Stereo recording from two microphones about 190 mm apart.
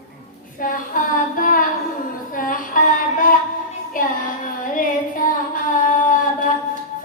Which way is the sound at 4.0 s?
45° left (ahead or behind).